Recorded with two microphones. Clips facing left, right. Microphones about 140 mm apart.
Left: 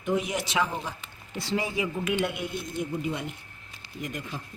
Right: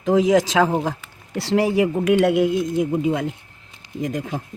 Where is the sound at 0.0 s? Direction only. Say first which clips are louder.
Right 12 dB; 90° right.